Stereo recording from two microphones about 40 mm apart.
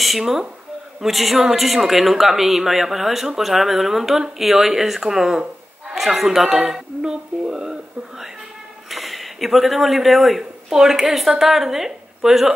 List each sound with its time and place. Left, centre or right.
0.2 s a man's voice: centre
6.7 s speech: centre
8.9 s speech: centre